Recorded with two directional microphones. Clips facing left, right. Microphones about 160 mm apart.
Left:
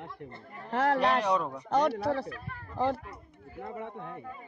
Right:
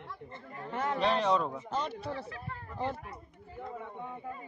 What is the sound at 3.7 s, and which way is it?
Speech, 75° left (ahead or behind).